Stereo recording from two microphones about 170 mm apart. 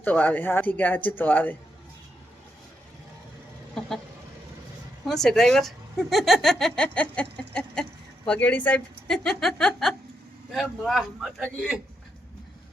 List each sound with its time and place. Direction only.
0.0 s speech: 10° left (ahead or behind)
3.8 s a sound: 5° left (ahead or behind)
5.0 s speech: centre (ahead or behind)